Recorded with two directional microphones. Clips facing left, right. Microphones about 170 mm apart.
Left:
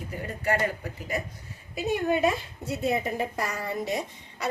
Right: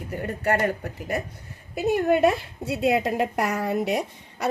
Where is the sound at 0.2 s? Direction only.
55° right (ahead or behind).